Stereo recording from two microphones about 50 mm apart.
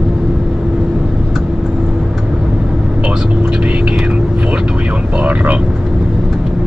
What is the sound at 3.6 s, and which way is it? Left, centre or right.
Whispering, right.